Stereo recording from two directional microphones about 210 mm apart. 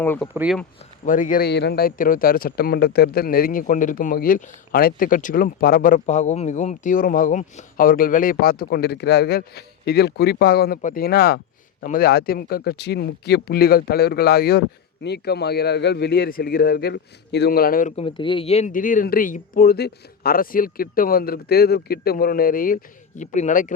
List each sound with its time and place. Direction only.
0.0 s speech: 10° left (ahead or behind)
0.3 s speech: 5° right (ahead or behind)
1.0 s a man's voice: 40° left (ahead or behind)